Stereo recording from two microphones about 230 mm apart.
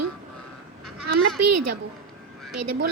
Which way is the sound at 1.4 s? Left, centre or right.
Right.